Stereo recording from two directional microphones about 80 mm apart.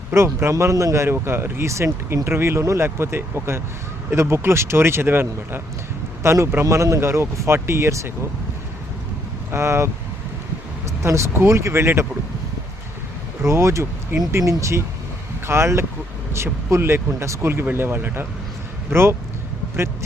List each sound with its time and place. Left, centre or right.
0.1 s speech: right
9.5 s speech: right
13.4 s speech: right